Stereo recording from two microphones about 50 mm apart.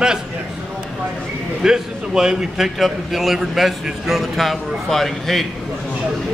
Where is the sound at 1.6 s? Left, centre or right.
Centre.